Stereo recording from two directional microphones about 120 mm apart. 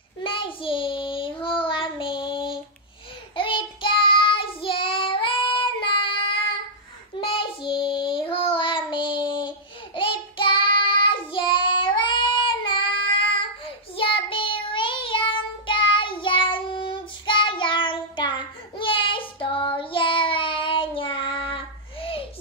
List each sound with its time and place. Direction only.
0.2 s child singing: 45° left (ahead or behind)
7.2 s child singing: 45° left (ahead or behind)